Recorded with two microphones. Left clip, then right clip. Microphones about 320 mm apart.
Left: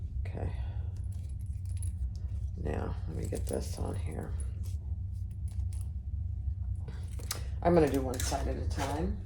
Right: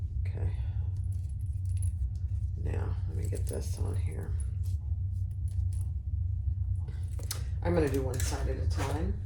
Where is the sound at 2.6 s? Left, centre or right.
Left.